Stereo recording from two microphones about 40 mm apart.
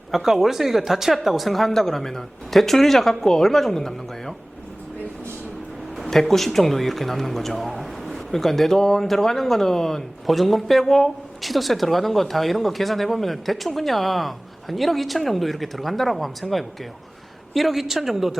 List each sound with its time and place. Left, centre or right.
0.1 s speech: centre
6.1 s speech: centre
10.2 s speech: centre